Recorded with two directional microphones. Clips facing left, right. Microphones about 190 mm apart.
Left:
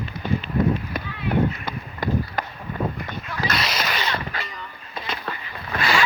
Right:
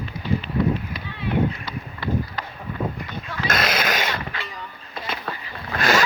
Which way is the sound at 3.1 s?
50° left (ahead or behind).